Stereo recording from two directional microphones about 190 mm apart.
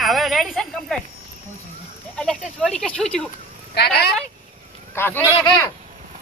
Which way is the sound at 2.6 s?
5° left (ahead or behind).